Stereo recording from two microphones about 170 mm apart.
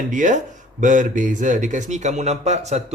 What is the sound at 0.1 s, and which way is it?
Speech, 50° right (ahead or behind).